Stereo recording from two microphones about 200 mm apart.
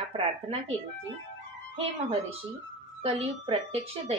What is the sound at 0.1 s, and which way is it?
Speech, 30° right (ahead or behind).